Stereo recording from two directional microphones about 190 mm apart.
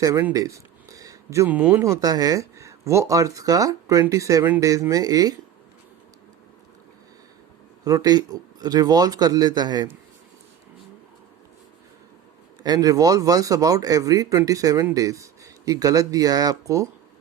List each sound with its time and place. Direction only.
0.0 s speech: 15° right (ahead or behind)
7.9 s speech: 20° right (ahead or behind)
12.6 s speech: 20° right (ahead or behind)